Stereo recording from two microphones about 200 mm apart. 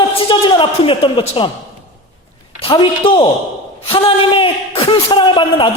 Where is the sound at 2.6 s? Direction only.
25° left (ahead or behind).